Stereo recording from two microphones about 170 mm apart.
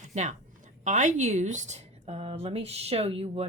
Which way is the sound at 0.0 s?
45° right (ahead or behind).